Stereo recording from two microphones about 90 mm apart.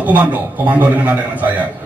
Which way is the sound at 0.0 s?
20° right (ahead or behind).